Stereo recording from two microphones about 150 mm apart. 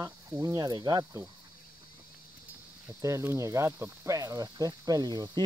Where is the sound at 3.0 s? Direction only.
20° right (ahead or behind).